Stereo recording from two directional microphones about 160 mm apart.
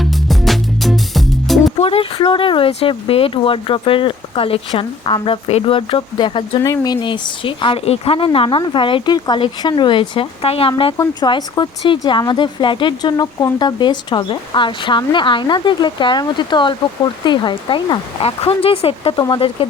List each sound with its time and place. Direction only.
0.0 s music: centre (ahead or behind)
1.8 s speech: 35° left (ahead or behind)
10.9 s speech: 25° left (ahead or behind)